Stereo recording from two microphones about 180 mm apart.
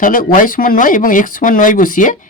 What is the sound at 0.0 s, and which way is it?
Speech, 50° left (ahead or behind).